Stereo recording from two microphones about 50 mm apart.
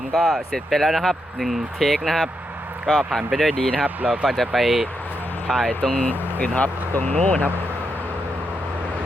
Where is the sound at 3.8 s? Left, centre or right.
Right.